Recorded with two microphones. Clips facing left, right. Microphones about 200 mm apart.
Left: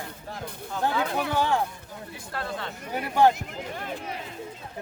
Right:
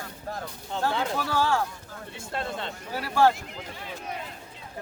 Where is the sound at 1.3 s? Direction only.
20° left (ahead or behind).